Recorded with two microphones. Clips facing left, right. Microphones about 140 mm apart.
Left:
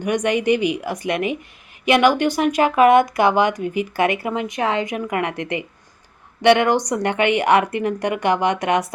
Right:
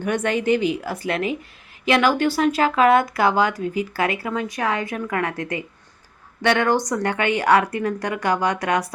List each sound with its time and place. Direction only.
0.0 s a woman's voice: 15° left (ahead or behind)